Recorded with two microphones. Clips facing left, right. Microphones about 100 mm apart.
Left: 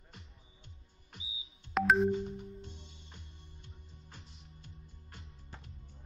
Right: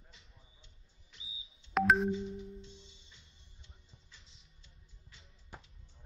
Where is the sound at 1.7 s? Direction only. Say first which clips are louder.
Even; centre (ahead or behind).